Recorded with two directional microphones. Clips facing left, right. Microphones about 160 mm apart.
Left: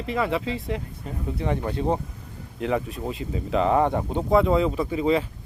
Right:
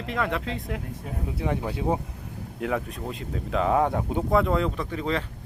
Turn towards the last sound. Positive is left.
turn(degrees=10)  # may be behind; listen again after turning